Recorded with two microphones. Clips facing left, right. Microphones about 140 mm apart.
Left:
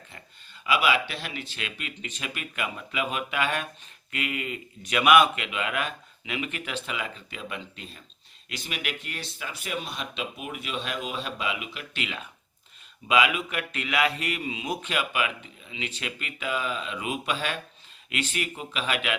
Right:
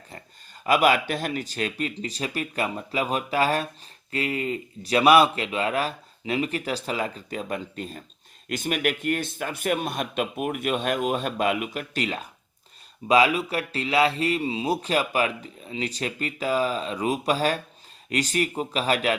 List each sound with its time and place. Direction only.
0.1 s speech: 45° right (ahead or behind)